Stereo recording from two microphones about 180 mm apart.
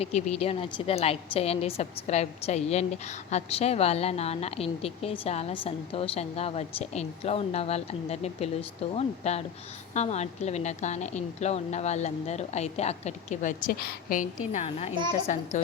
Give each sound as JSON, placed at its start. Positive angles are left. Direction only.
{"t": 0.0, "sound": "a woman's voice", "side_deg": 35}
{"t": 14.5, "sound": "a woman's voice", "side_deg": 35}